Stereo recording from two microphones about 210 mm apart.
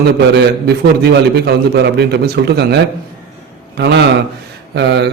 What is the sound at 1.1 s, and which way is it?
A man's voice, 50° right (ahead or behind).